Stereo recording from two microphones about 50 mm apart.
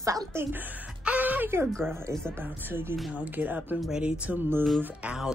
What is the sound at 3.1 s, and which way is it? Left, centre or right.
Speech, right.